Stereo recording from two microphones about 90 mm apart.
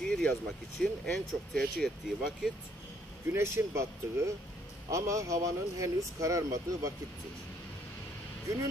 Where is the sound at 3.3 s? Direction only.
30° right (ahead or behind).